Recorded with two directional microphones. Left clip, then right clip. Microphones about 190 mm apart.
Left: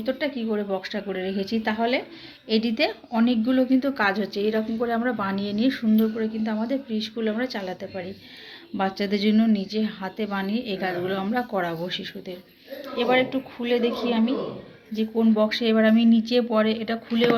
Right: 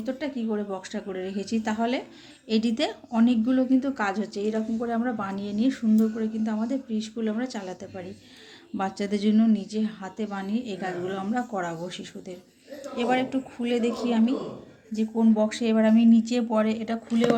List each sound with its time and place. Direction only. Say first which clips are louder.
0.0 s speech: left 4 dB; centre (ahead or behind)